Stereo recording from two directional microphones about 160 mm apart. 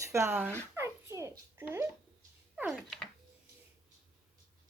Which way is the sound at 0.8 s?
15° right (ahead or behind).